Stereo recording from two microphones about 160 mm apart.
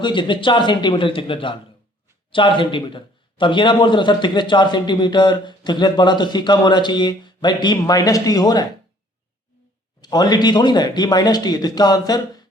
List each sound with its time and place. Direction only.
0.0 s a man's voice: 30° left (ahead or behind)
10.0 s a man's voice: 25° left (ahead or behind)